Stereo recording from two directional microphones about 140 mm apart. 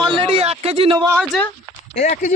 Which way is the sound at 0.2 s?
45° right (ahead or behind).